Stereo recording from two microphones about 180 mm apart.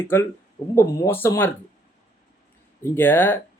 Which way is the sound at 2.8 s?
10° left (ahead or behind).